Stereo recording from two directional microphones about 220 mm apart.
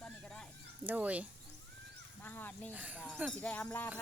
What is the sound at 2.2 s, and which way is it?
Speech, 10° left (ahead or behind).